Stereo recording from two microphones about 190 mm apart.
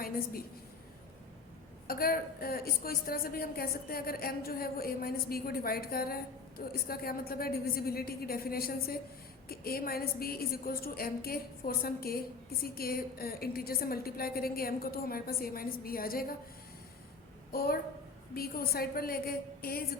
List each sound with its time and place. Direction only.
1.9 s a woman's voice: 50° left (ahead or behind)
17.5 s a woman's voice: 50° left (ahead or behind)